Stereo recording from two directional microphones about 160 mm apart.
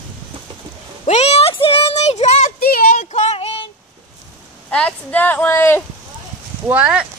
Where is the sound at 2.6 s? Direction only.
65° left (ahead or behind).